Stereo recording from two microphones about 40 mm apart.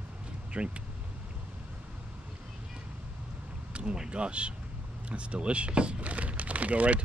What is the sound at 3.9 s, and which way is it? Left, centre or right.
Speech, right.